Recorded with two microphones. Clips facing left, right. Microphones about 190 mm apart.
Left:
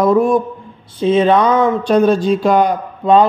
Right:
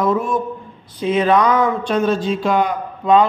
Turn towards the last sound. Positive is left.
turn(degrees=35)  # may be behind; listen again after turning